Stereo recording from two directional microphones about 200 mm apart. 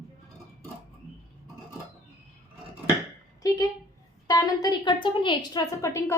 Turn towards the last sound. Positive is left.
turn(degrees=15)  # may be behind; listen again after turning